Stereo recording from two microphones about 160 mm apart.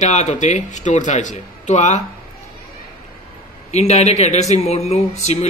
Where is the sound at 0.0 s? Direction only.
45° left (ahead or behind).